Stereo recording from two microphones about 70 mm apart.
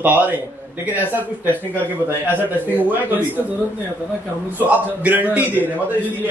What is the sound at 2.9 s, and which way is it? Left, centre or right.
Speech, right.